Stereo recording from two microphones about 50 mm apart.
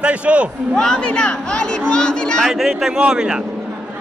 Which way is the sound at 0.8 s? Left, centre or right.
Centre.